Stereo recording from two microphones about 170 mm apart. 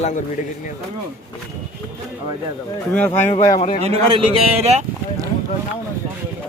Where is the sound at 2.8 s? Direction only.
10° left (ahead or behind).